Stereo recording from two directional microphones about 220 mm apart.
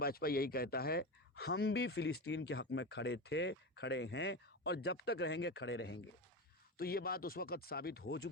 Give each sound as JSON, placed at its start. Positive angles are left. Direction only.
{"t": 0.0, "sound": "speech", "side_deg": 45}